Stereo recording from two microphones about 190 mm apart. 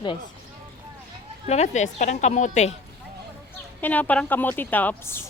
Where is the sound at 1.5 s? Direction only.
35° left (ahead or behind).